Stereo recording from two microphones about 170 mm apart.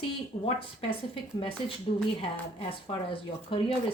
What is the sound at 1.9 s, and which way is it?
Speech, 40° left (ahead or behind).